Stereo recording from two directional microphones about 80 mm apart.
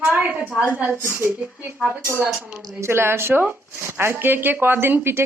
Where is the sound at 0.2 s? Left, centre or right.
Right.